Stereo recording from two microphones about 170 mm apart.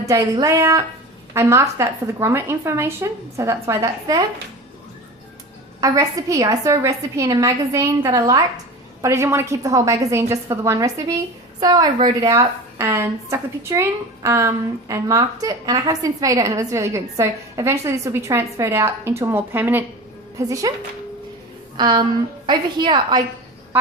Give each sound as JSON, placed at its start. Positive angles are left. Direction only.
{"t": 0.1, "sound": "a woman's voice", "side_deg": -20}
{"t": 5.8, "sound": "a woman's voice", "side_deg": -20}
{"t": 21.8, "sound": "a woman's voice", "side_deg": -25}